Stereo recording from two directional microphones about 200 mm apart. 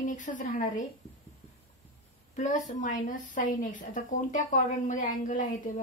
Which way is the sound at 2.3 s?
40° left (ahead or behind).